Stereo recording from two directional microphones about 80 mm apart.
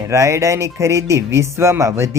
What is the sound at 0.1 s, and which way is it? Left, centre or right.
Speech, right.